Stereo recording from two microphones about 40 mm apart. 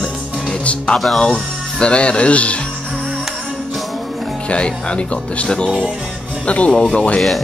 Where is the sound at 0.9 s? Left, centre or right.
Centre.